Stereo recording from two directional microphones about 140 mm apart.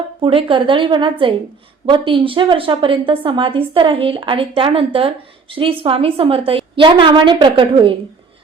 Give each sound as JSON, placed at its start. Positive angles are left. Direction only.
{"t": 0.2, "sound": "a woman's voice", "side_deg": -40}